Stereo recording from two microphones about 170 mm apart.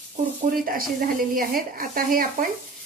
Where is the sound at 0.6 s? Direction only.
55° right (ahead or behind).